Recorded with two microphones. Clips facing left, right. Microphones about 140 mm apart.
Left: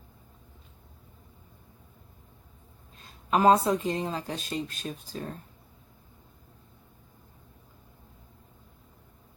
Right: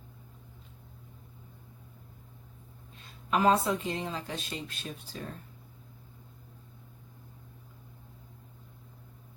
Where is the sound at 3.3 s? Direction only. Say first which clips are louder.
Left 4 dB; 40° left (ahead or behind).